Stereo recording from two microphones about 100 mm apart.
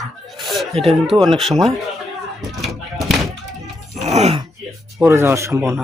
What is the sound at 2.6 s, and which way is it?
Speech, centre (ahead or behind).